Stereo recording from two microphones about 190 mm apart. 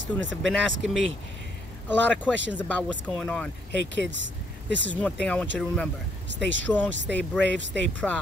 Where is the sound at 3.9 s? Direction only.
70° right (ahead or behind).